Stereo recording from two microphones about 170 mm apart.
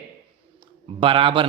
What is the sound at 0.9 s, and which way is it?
Mantra, 30° right (ahead or behind).